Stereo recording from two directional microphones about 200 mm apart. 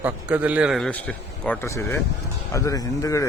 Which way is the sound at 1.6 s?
15° left (ahead or behind).